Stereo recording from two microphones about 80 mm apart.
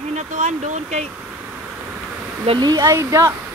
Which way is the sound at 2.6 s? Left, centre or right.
Right.